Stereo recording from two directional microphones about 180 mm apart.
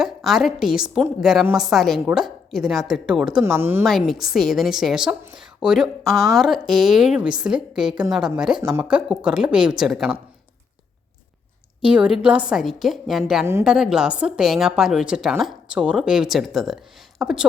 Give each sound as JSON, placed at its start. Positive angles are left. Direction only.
{"t": 0.0, "sound": "a woman's voice", "side_deg": 0}
{"t": 3.4, "sound": "speech", "side_deg": -15}
{"t": 3.8, "sound": "a woman's voice", "side_deg": 0}
{"t": 8.5, "sound": "a woman's voice", "side_deg": -20}
{"t": 8.8, "sound": "a woman's voice", "side_deg": -5}
{"t": 11.8, "sound": "a woman's voice", "side_deg": -5}
{"t": 13.4, "sound": "a woman's voice", "side_deg": -15}